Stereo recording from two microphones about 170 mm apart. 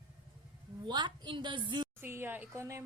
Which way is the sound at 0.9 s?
25° right (ahead or behind).